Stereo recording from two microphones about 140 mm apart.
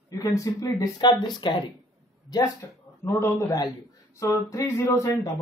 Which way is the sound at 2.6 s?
20° left (ahead or behind).